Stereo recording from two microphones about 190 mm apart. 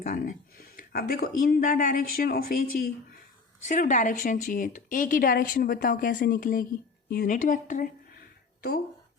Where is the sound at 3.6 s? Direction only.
45° left (ahead or behind).